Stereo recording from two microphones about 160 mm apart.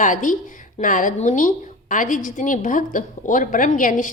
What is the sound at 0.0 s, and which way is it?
A woman's voice, 55° left (ahead or behind).